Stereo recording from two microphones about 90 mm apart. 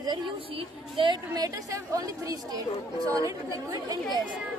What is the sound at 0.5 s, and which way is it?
Speech, 65° right (ahead or behind).